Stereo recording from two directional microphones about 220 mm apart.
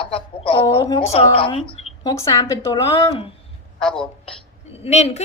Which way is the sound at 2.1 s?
15° left (ahead or behind).